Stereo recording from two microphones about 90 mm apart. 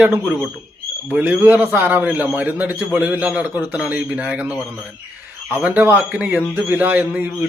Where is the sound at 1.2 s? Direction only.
25° right (ahead or behind).